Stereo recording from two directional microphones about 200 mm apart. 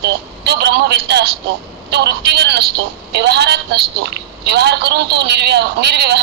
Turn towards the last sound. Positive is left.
turn(degrees=-55)  # may be behind; listen again after turning